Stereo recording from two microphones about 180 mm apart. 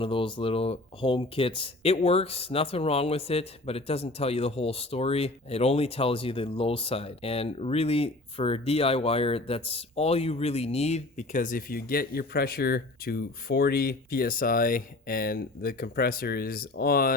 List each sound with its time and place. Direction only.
0.0 s speech: 30° left (ahead or behind); by 17.2 s 55° left (ahead or behind)